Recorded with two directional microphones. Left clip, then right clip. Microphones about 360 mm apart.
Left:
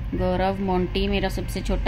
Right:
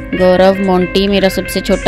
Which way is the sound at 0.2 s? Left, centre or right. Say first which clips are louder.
Right 16 dB; right.